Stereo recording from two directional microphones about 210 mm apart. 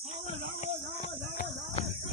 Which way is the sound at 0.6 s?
35° left (ahead or behind).